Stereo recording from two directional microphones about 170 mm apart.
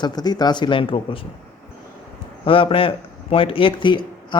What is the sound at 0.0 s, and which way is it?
Speech, 25° left (ahead or behind).